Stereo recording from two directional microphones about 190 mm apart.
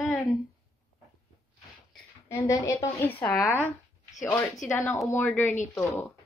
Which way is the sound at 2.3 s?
15° left (ahead or behind).